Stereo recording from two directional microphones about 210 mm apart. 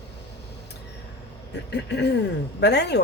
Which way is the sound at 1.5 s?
55° left (ahead or behind).